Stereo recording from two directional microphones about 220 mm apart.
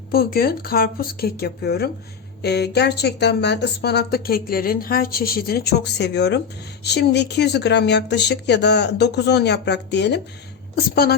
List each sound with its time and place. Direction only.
0.1 s speech: 45° left (ahead or behind)